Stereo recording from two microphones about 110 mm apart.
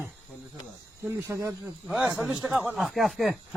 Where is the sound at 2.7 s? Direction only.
Centre (ahead or behind).